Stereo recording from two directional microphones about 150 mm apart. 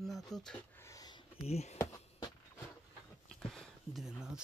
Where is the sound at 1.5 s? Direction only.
45° left (ahead or behind).